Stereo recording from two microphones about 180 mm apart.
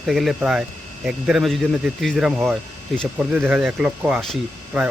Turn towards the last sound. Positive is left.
turn(degrees=-5)  # may be behind; listen again after turning